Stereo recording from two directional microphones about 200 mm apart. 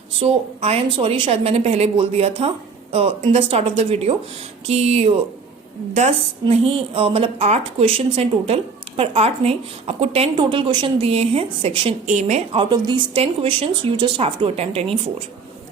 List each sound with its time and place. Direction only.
0.2 s a woman's voice: 30° right (ahead or behind)
12.6 s a woman's voice: 20° right (ahead or behind)